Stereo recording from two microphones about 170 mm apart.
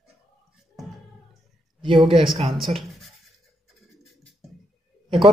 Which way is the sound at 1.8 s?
30° right (ahead or behind).